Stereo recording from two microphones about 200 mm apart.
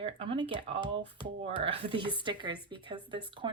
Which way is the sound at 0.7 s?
65° right (ahead or behind).